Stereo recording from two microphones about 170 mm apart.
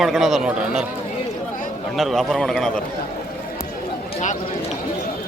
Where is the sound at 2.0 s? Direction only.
Centre (ahead or behind).